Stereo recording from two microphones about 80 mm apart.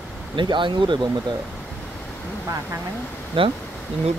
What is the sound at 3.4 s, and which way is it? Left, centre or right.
Speech, right.